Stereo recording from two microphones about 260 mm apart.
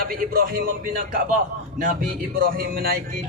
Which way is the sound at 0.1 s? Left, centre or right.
Right.